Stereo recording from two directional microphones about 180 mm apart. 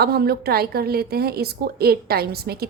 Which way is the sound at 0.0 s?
60° right (ahead or behind).